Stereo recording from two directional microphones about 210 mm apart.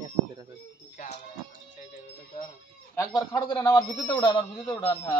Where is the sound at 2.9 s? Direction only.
15° left (ahead or behind).